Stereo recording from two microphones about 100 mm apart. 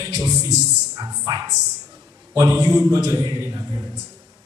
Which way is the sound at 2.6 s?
35° right (ahead or behind).